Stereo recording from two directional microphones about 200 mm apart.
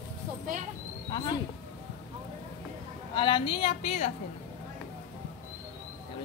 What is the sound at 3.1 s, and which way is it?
A woman's voice, 25° left (ahead or behind).